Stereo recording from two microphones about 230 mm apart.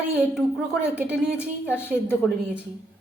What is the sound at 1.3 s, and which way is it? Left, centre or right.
Speech, centre.